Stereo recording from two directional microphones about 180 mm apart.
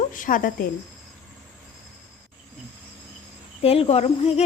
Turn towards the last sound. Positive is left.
turn(degrees=35)  # may be behind; listen again after turning